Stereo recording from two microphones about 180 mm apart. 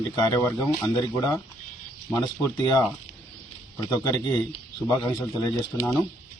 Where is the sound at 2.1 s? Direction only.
20° left (ahead or behind).